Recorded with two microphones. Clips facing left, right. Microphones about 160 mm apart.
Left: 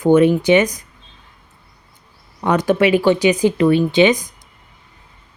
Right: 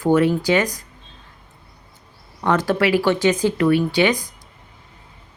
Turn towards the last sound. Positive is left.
turn(degrees=20)  # may be behind; listen again after turning